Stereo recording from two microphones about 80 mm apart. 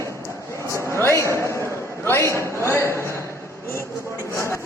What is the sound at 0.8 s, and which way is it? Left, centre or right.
A man's voice, left.